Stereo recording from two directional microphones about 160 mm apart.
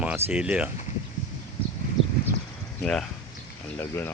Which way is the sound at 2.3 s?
90° left.